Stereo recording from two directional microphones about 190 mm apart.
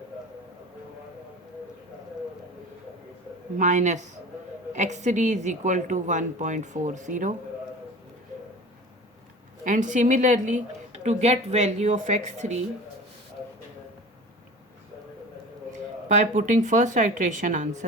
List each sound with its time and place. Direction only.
3.6 s a woman's voice: 40° right (ahead or behind)
9.6 s a woman's voice: 40° right (ahead or behind)
15.7 s a woman's voice: 40° right (ahead or behind)